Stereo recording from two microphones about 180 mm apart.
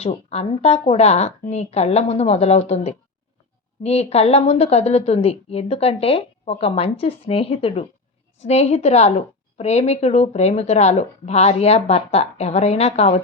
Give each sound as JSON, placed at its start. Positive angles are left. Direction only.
{"t": 0.0, "sound": "a woman's voice", "side_deg": 35}